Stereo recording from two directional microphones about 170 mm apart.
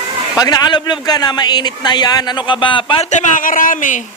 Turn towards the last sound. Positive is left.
turn(degrees=50)  # may be behind; listen again after turning